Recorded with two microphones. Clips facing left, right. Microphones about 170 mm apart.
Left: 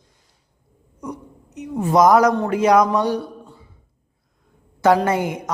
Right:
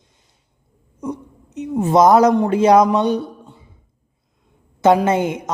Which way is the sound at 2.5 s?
30° right (ahead or behind).